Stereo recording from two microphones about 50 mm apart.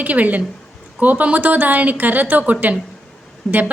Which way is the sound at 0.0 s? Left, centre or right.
Right.